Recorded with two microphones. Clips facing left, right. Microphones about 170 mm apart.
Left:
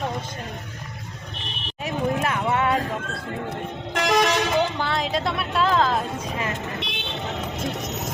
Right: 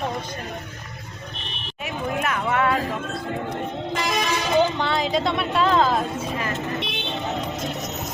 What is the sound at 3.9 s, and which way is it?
Vehicle, 75° left (ahead or behind).